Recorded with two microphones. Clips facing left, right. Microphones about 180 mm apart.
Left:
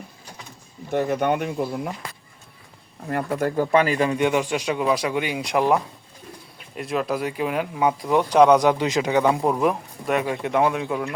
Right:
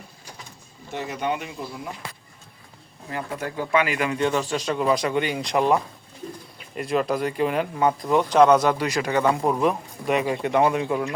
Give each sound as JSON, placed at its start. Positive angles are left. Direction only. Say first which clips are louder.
{"t": 0.9, "sound": "speech", "louder": "left 6 dB", "side_deg": 55}
{"t": 3.1, "sound": "speech", "louder": "left 6 dB", "side_deg": 55}
{"t": 4.2, "sound": "speech", "louder": "left 2 dB", "side_deg": 15}